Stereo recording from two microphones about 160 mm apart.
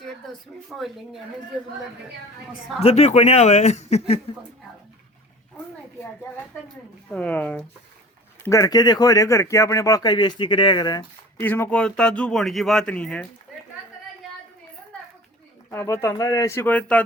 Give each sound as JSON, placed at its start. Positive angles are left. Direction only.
{"t": 0.7, "sound": "speech", "side_deg": 0}
{"t": 2.8, "sound": "speech", "side_deg": 40}
{"t": 7.1, "sound": "speech", "side_deg": 10}
{"t": 8.4, "sound": "speech", "side_deg": 20}
{"t": 11.3, "sound": "speech", "side_deg": 15}
{"t": 15.7, "sound": "speech", "side_deg": 15}